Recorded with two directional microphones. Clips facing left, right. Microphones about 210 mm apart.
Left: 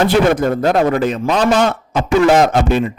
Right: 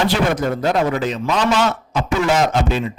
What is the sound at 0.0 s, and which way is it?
A man's voice, 55° left (ahead or behind).